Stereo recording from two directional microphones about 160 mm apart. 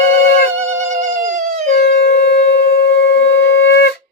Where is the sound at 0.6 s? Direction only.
45° right (ahead or behind).